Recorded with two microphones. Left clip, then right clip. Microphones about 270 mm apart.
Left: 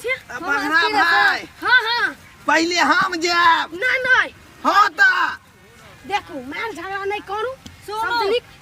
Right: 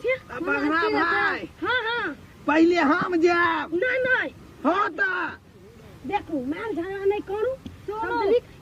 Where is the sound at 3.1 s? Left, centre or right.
Left.